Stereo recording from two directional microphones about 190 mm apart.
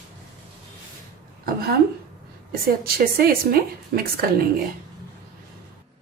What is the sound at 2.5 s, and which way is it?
A woman's voice, 50° right (ahead or behind).